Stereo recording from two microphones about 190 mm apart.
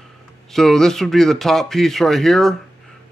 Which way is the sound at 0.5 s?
Centre (ahead or behind).